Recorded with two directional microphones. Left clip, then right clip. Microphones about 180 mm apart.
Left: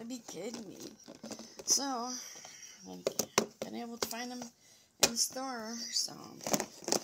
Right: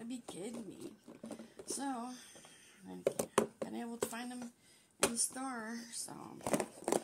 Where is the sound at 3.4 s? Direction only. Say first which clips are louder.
Left 2 dB; 25° left (ahead or behind).